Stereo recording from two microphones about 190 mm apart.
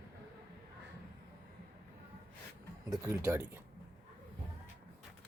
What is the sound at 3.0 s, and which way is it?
Speech, 15° right (ahead or behind).